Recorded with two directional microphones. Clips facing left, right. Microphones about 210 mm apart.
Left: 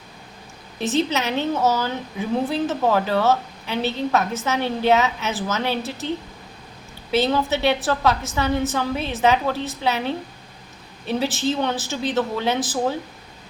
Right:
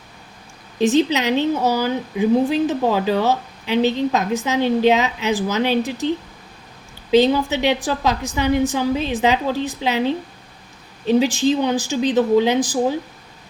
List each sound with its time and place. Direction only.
0.8 s speech: 15° right (ahead or behind)
7.1 s speech: 15° right (ahead or behind)
11.0 s speech: 15° right (ahead or behind)